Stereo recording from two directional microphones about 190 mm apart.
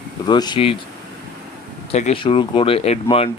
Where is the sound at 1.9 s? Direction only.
35° left (ahead or behind).